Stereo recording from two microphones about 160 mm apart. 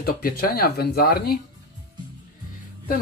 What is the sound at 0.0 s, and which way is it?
Speech, 65° left (ahead or behind).